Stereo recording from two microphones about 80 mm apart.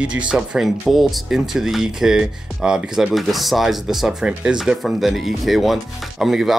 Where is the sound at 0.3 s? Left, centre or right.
Centre.